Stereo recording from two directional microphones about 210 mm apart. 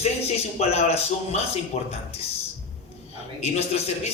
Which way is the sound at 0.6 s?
30° left (ahead or behind).